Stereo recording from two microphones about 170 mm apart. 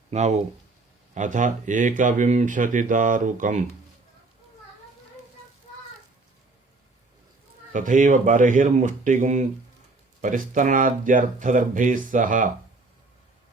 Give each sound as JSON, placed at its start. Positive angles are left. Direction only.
{"t": 0.1, "sound": "speech", "side_deg": -40}
{"t": 7.7, "sound": "speech", "side_deg": -50}